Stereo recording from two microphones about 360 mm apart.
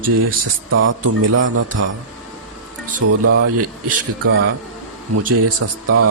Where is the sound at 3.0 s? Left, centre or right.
Right.